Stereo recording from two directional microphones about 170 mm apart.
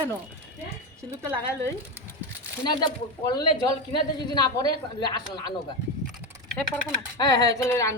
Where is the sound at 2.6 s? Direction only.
25° left (ahead or behind).